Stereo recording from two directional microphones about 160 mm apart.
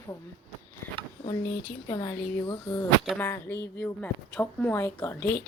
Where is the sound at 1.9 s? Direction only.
20° left (ahead or behind).